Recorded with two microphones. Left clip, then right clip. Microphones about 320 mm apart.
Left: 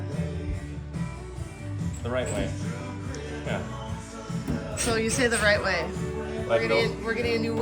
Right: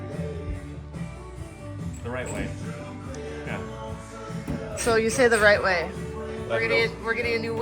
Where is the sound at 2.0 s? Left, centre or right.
Centre.